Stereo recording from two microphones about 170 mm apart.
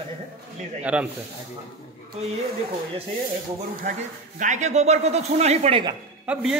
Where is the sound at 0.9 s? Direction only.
5° right (ahead or behind).